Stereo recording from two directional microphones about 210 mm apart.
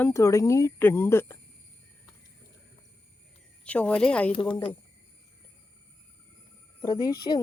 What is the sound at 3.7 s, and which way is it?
Speech, 5° left (ahead or behind).